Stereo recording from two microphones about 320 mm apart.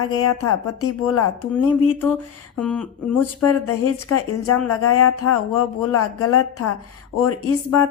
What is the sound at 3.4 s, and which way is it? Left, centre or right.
Speech, left.